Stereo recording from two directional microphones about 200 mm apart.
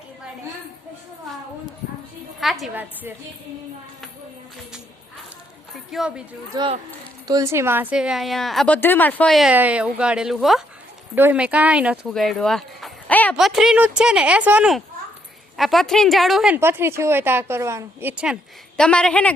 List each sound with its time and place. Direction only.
2.4 s a woman's voice: centre (ahead or behind)
5.7 s a woman's voice: centre (ahead or behind)
6.5 s a woman's voice: 25° right (ahead or behind)
18.8 s a woman's voice: 5° left (ahead or behind)